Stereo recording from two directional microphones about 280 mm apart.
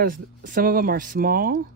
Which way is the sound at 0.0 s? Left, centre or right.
Right.